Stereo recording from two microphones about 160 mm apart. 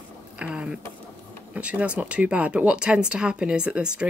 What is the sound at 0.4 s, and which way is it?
Speech, 5° right (ahead or behind).